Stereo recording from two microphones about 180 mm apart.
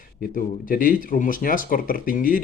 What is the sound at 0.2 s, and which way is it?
Speech, 50° left (ahead or behind).